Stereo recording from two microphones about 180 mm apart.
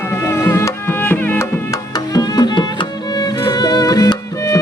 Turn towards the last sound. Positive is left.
turn(degrees=20)  # may be behind; listen again after turning